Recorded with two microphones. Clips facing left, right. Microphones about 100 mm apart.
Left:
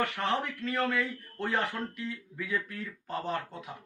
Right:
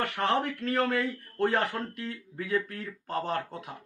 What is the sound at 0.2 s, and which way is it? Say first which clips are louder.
A man's voice: right 3 dB; 45° right (ahead or behind).